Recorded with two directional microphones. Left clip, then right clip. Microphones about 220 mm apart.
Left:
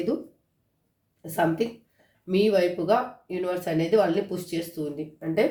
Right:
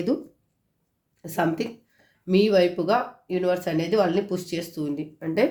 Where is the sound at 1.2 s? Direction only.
40° right (ahead or behind).